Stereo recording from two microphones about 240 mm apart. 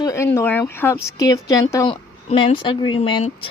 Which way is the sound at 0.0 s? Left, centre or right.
Centre.